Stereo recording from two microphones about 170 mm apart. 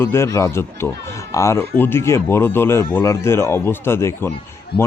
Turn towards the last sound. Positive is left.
turn(degrees=70)  # may be behind; listen again after turning